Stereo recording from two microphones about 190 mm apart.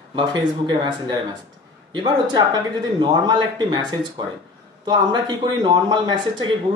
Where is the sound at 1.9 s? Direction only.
25° right (ahead or behind).